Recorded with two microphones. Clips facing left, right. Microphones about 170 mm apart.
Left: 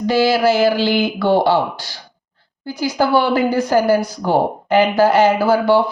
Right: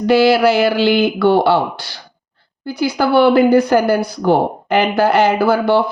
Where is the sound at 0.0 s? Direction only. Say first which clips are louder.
Right 3 dB; 65° right (ahead or behind).